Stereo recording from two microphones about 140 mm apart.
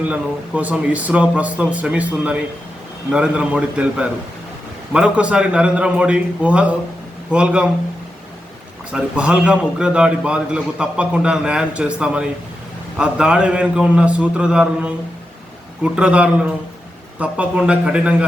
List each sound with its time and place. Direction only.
0.1 s a man's voice: 10° right (ahead or behind)
8.9 s a man's voice: 5° right (ahead or behind)